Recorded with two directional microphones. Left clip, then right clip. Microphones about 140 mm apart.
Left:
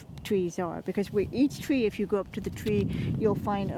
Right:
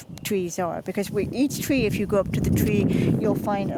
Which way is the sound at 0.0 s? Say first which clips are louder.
Right 2 dB; 35° right (ahead or behind).